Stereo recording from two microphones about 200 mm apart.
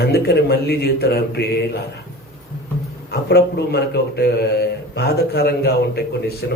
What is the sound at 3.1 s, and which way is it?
A man's voice, 55° left (ahead or behind).